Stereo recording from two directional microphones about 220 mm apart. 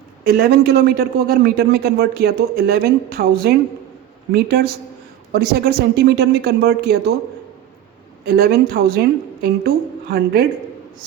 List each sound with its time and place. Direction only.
0.3 s a man's voice: 45° right (ahead or behind)
8.3 s a man's voice: 45° right (ahead or behind)